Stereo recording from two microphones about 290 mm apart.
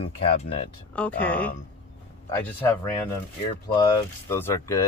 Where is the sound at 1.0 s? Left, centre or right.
Centre.